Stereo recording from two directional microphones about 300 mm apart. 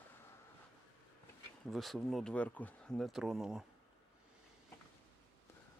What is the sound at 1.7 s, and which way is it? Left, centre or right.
Speech, centre.